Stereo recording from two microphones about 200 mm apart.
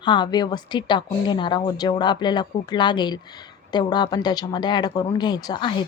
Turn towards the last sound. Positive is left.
turn(degrees=25)  # may be behind; listen again after turning